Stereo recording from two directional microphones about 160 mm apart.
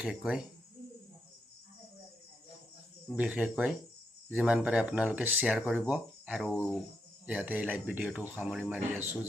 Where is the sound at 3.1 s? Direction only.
5° right (ahead or behind).